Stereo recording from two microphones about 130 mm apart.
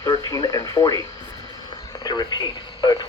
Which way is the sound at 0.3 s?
30° left (ahead or behind).